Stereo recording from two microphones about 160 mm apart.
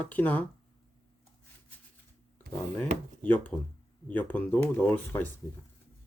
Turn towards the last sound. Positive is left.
turn(degrees=10)  # may be behind; listen again after turning